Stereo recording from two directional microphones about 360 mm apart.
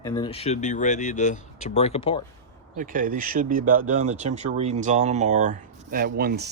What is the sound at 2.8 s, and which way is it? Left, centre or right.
Speech, right.